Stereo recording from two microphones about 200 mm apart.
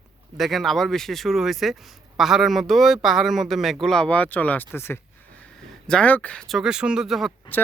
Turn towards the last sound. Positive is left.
turn(degrees=10)  # may be behind; listen again after turning